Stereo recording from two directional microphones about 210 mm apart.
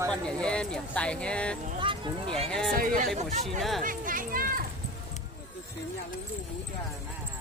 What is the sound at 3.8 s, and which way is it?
Speech, 40° right (ahead or behind).